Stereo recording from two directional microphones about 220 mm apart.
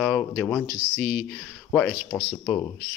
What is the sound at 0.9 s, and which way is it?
Speech, 50° left (ahead or behind).